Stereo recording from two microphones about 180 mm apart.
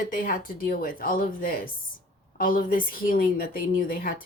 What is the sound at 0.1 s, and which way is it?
A woman's voice, 50° left (ahead or behind).